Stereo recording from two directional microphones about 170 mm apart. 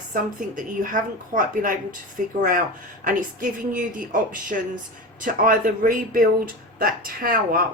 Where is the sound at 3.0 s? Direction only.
50° right (ahead or behind).